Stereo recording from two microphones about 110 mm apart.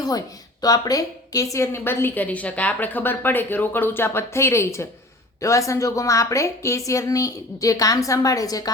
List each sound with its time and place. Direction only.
0.0 s a woman's voice: 35° left (ahead or behind)